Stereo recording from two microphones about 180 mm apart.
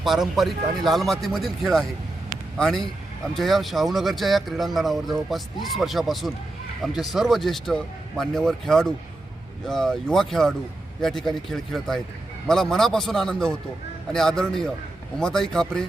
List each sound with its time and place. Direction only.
0.0 s speech: centre (ahead or behind)